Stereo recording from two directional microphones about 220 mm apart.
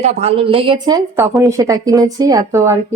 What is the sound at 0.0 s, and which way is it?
A woman's voice, 30° right (ahead or behind).